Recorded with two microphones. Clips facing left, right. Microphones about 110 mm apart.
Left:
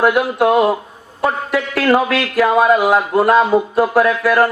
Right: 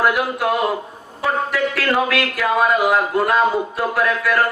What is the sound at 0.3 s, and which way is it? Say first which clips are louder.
Speech: left 7 dB; 30° left (ahead or behind).